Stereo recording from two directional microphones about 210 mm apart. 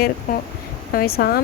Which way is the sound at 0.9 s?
45° left (ahead or behind).